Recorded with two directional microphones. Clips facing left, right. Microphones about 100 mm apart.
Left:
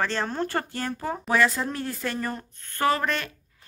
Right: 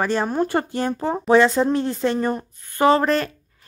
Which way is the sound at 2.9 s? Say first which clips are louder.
Right 9 dB; 35° right (ahead or behind).